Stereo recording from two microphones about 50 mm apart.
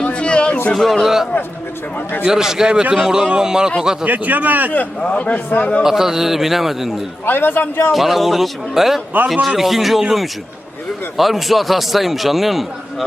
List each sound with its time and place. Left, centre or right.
0.0 s a sound: left
0.7 s a man's voice: centre
4.0 s a man's voice: right
4.9 s a man's voice: left
5.8 s a man's voice: centre
7.3 s a man's voice: left
7.9 s a man's voice: centre